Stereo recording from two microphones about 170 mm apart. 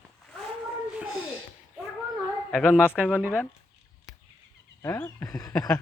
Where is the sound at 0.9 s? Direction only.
5° right (ahead or behind).